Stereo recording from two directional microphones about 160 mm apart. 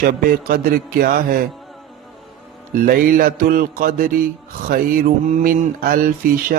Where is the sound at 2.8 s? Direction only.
60° right (ahead or behind).